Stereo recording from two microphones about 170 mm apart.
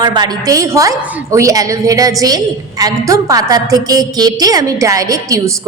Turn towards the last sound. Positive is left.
turn(degrees=-20)  # may be behind; listen again after turning